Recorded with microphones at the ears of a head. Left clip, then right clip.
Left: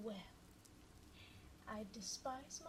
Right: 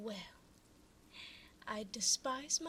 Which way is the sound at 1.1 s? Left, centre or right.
Right.